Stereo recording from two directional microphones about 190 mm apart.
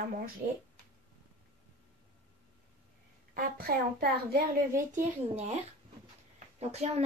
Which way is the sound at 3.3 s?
55° right (ahead or behind).